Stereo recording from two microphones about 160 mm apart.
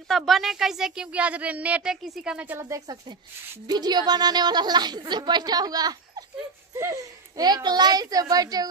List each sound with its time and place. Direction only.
0.1 s a woman's voice: centre (ahead or behind); by 8.6 s 25° right (ahead or behind)